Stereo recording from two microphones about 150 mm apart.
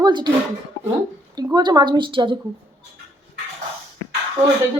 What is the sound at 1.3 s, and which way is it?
A woman's voice, 25° right (ahead or behind).